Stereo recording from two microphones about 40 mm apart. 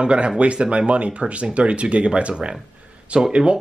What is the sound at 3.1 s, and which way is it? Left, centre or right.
Speech, centre.